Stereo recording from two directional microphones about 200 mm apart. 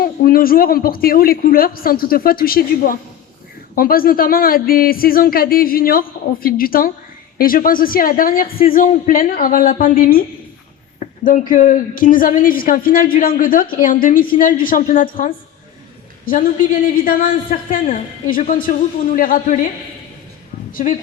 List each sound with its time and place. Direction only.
0.0 s a woman's voice: 45° left (ahead or behind)
20.7 s a woman's voice: 40° left (ahead or behind)